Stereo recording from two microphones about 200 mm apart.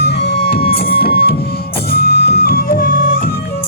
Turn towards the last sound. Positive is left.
turn(degrees=45)  # may be behind; listen again after turning